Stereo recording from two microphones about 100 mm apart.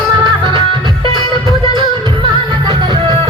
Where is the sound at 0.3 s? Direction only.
45° right (ahead or behind).